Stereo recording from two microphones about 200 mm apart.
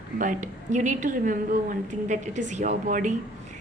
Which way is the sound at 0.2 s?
40° right (ahead or behind).